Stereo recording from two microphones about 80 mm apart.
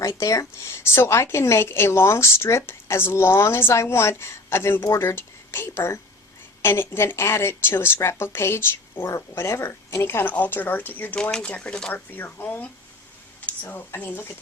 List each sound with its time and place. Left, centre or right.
0.0 s a woman's voice: left
11.2 s speech: centre
12.1 s speech: left